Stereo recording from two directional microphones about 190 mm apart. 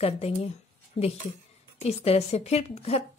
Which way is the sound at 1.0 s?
30° left (ahead or behind).